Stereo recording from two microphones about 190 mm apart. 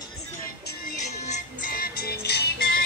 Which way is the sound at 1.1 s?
35° left (ahead or behind).